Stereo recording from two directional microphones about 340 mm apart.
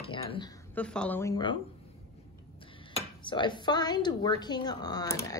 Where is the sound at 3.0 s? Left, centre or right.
Centre.